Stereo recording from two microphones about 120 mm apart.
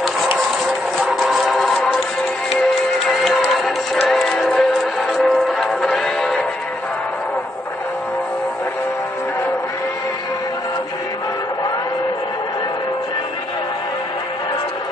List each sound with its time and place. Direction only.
0.9 s music: centre (ahead or behind)
3.1 s music: centre (ahead or behind)